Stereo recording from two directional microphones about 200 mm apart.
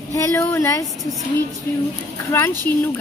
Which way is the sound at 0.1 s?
15° left (ahead or behind).